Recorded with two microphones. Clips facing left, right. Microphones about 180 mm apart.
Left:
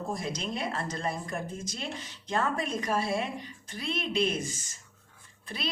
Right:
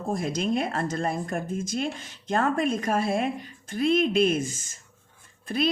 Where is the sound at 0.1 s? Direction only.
50° right (ahead or behind).